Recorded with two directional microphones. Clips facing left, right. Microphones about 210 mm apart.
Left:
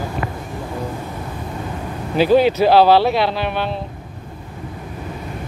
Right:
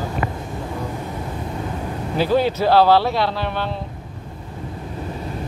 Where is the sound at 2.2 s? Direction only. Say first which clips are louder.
Left 5 dB; 20° left (ahead or behind).